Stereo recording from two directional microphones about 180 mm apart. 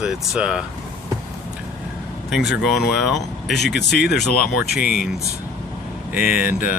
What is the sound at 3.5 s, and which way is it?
Speech, 70° left (ahead or behind).